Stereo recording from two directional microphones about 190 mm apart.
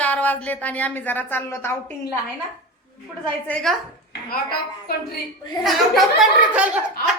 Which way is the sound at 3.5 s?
5° left (ahead or behind).